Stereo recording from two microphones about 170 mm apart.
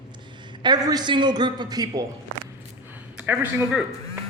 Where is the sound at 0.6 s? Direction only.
25° right (ahead or behind).